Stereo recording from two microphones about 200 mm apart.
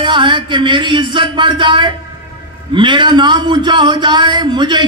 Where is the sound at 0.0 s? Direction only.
25° right (ahead or behind).